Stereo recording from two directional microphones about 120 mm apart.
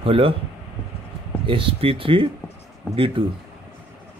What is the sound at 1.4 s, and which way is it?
Speech, 45° right (ahead or behind).